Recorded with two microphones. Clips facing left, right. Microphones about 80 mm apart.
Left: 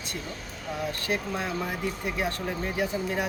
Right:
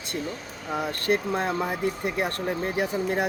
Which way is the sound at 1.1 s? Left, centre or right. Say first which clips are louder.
Right 7 dB; right.